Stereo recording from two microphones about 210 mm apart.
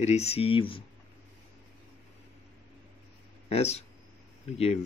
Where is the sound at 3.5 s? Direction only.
30° left (ahead or behind).